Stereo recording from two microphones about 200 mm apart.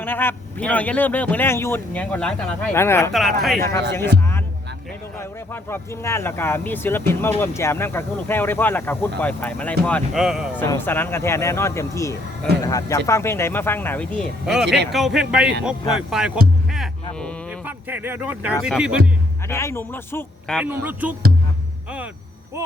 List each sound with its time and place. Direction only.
0.0 s speech: 10° left (ahead or behind)
3.1 s speech: centre (ahead or behind)
3.6 s speech: 15° left (ahead or behind)
5.7 s speech: 15° left (ahead or behind); by 10.6 s 5° right (ahead or behind)
10.6 s speech: 10° left (ahead or behind)
14.4 s speech: centre (ahead or behind)
17.7 s speech: 10° right (ahead or behind)
19.5 s speech: 15° left (ahead or behind)
20.6 s a man's voice: 10° right (ahead or behind)